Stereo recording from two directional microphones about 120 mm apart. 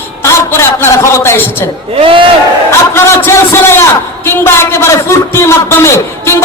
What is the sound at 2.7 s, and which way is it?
A man's voice, 20° left (ahead or behind).